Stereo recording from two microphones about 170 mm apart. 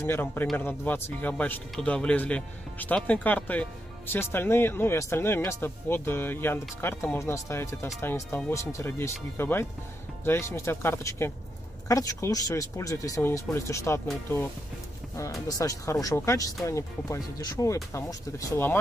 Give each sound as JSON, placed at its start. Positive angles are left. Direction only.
{"t": 0.0, "sound": "speech", "side_deg": 10}
{"t": 15.4, "sound": "speech", "side_deg": 20}